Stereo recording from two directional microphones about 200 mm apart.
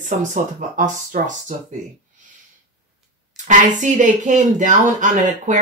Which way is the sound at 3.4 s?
40° right (ahead or behind).